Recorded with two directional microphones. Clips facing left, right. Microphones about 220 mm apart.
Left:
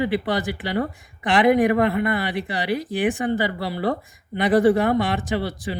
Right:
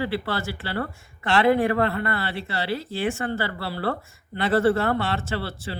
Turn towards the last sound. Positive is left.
turn(degrees=15)  # may be behind; listen again after turning